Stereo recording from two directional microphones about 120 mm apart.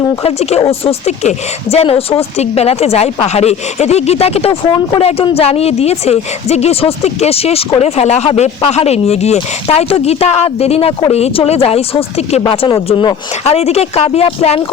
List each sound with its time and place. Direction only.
0.2 s speech: 55° left (ahead or behind)
12.5 s speech: 45° left (ahead or behind)
13.4 s speech: 60° left (ahead or behind)